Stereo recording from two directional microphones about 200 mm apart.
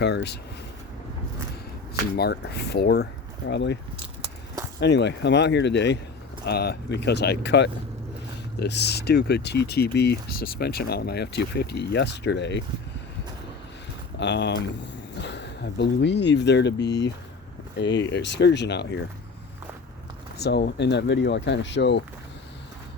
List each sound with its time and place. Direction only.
0.0 s speech: 60° left (ahead or behind)
2.1 s speech: 55° left (ahead or behind)
4.8 s speech: 60° left (ahead or behind)
14.2 s speech: 60° left (ahead or behind)
20.4 s speech: 55° left (ahead or behind)